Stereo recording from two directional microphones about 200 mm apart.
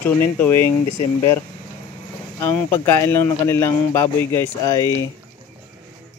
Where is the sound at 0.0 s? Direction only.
10° left (ahead or behind).